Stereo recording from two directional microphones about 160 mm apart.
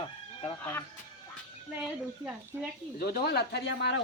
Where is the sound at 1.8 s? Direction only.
5° right (ahead or behind).